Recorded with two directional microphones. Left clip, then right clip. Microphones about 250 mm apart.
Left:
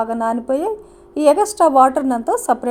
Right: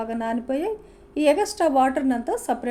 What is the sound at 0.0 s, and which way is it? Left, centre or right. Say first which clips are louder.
A woman's voice: left 8 dB; centre.